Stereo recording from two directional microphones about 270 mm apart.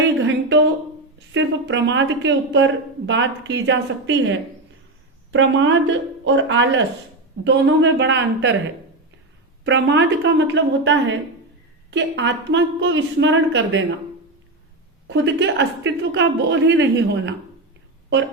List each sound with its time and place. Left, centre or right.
0.2 s a sound: right
1.3 s speech: right
9.6 s a woman's voice: right
15.0 s speech: right